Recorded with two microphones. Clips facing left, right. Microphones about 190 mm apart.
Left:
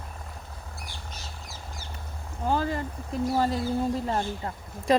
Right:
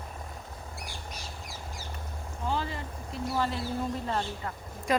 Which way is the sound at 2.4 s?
45° left (ahead or behind).